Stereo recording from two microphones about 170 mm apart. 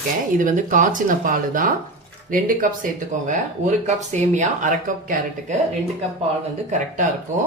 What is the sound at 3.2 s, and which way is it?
Speech, 45° right (ahead or behind).